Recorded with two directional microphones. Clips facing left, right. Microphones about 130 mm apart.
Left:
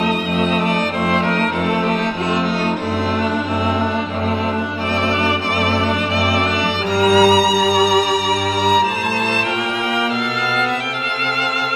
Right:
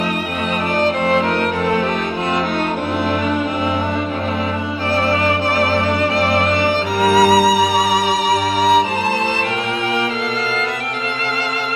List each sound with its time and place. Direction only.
7.0 s music: 40° right (ahead or behind)